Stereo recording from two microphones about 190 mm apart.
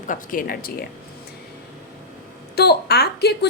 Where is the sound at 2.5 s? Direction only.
60° left (ahead or behind).